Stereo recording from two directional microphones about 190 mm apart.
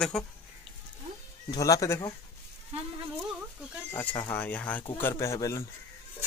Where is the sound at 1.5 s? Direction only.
15° left (ahead or behind).